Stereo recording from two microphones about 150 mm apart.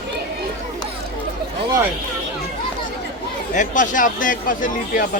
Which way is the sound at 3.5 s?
55° left (ahead or behind).